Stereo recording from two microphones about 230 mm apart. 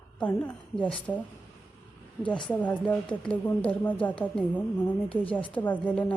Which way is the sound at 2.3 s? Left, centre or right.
Centre.